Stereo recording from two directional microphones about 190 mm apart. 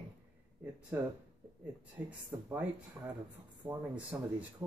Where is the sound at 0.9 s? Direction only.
10° right (ahead or behind).